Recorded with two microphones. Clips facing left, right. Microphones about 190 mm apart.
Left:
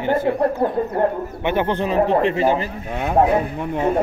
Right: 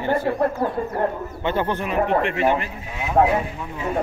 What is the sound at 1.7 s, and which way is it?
Speech, 30° left (ahead or behind).